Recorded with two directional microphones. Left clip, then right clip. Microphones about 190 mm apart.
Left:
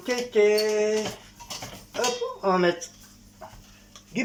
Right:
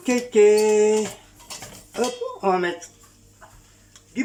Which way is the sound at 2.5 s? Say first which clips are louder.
Right 1 dB; 10° right (ahead or behind).